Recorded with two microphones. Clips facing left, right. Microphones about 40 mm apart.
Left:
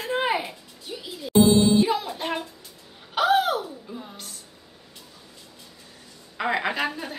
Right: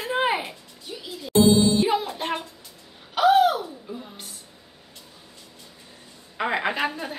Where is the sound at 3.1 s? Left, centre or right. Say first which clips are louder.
Right 3 dB; centre.